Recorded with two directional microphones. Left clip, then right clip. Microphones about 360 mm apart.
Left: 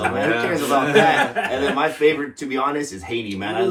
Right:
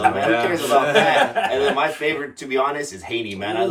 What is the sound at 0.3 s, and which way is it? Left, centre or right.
A man's voice, centre.